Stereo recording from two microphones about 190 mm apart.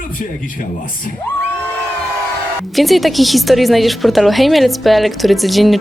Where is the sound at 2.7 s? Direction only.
Centre (ahead or behind).